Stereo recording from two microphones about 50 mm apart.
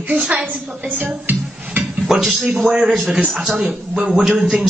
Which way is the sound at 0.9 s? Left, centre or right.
Right.